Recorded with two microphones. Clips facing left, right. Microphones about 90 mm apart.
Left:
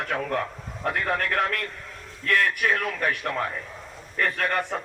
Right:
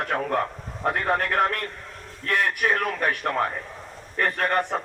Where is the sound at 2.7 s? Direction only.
45° right (ahead or behind).